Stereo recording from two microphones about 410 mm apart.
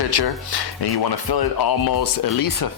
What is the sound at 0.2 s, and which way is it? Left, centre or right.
Speech, left.